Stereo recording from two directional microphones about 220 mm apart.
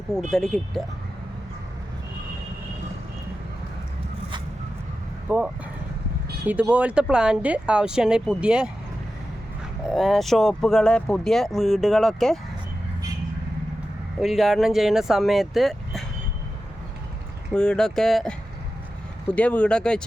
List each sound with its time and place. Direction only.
0.1 s speech: centre (ahead or behind)
5.3 s speech: 10° right (ahead or behind)
9.9 s speech: centre (ahead or behind)
14.2 s speech: centre (ahead or behind)
17.5 s speech: 5° left (ahead or behind)